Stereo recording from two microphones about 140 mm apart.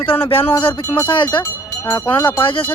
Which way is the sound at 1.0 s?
35° left (ahead or behind).